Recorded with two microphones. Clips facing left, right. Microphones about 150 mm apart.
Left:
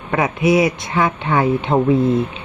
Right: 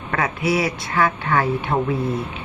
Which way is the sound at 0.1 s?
20° left (ahead or behind).